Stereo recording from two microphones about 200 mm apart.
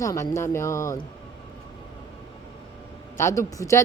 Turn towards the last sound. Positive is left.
turn(degrees=15)  # may be behind; listen again after turning